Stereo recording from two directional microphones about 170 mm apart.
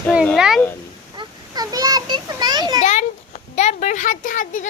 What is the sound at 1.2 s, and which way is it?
Children playing, 25° right (ahead or behind).